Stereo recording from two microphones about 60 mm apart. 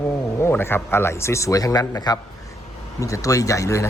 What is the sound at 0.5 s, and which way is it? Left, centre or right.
A woman's voice, left.